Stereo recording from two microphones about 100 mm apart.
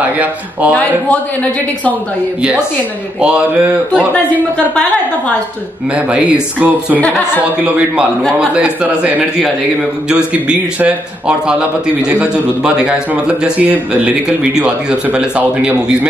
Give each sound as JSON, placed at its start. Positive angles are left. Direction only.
{"t": 0.2, "sound": "a man's voice", "side_deg": -15}
{"t": 3.2, "sound": "a man's voice", "side_deg": -10}
{"t": 5.9, "sound": "a man's voice", "side_deg": -10}
{"t": 6.9, "sound": "speech", "side_deg": 15}
{"t": 7.6, "sound": "a man's voice", "side_deg": -10}